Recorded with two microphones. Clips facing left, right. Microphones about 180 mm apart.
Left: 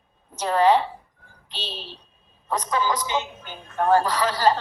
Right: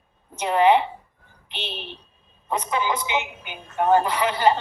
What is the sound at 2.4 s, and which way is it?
A woman's voice, 10° right (ahead or behind).